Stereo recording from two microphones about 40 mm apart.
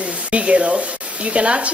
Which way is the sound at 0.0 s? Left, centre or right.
Right.